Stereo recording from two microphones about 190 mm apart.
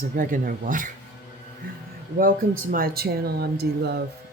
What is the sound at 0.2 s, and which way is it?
Speech, 45° right (ahead or behind).